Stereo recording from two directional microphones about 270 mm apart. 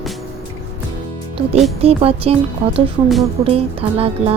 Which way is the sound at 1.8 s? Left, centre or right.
Right.